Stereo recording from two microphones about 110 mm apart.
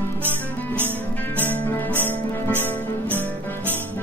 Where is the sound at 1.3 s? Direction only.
15° left (ahead or behind).